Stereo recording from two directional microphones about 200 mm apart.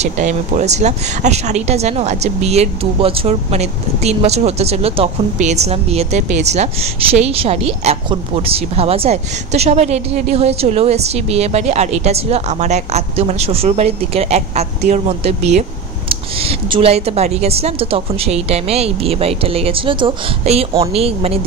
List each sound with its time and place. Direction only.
0.0 s a woman's voice: 35° right (ahead or behind)